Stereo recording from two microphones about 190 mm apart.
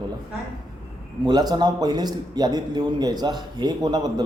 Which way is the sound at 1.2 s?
20° right (ahead or behind).